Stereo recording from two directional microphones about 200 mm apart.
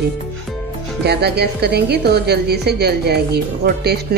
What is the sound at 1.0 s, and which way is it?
A woman's voice, 55° right (ahead or behind).